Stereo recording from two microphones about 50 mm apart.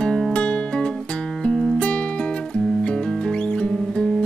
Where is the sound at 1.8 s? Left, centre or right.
Left.